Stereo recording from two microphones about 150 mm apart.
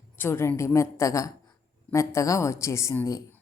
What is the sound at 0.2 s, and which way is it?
A woman's voice, 15° left (ahead or behind).